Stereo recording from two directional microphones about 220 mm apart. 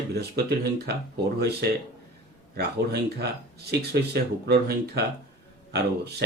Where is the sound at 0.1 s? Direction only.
45° right (ahead or behind).